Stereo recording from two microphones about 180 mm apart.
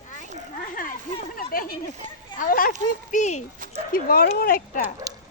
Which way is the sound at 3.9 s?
55° left (ahead or behind).